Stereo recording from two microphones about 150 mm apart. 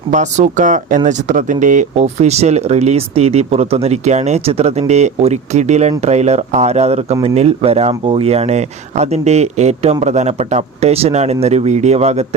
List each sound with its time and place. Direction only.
0.1 s speech: 55° right (ahead or behind)